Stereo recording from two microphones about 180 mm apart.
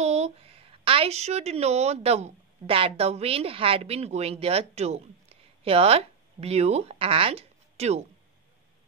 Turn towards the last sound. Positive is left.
turn(degrees=-35)  # may be behind; listen again after turning